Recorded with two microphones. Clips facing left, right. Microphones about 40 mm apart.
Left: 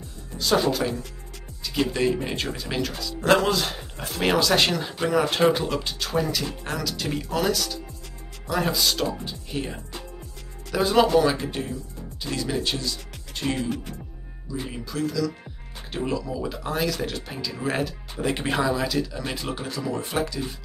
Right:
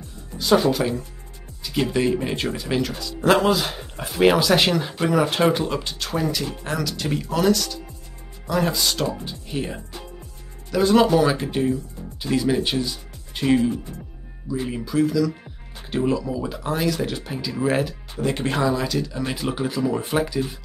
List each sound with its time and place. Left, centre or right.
0.4 s speech: centre
10.7 s speech: centre
14.6 s speech: centre